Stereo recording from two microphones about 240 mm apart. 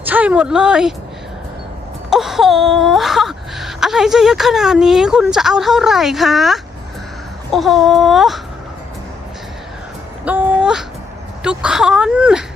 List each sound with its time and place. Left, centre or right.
0.0 s speech: centre
2.0 s wail: centre
10.2 s a sound: centre
11.4 s wail: centre